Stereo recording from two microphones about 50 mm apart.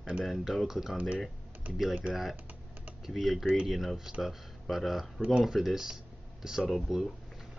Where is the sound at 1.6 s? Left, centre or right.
Right.